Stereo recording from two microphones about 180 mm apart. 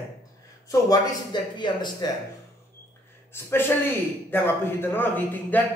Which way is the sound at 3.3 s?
10° left (ahead or behind).